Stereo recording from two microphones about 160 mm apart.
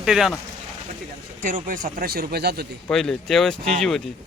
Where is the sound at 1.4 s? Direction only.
55° right (ahead or behind); by 2.7 s 80° right.